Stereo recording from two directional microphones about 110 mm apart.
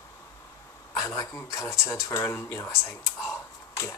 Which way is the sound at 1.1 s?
25° left (ahead or behind).